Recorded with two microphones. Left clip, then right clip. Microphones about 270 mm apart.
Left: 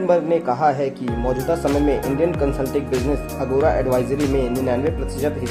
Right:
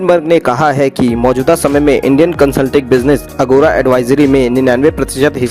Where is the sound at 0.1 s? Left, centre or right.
Right.